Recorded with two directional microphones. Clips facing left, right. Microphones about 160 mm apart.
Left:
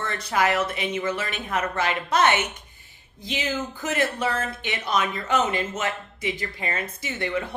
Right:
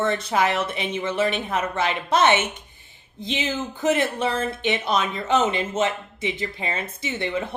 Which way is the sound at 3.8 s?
25° right (ahead or behind).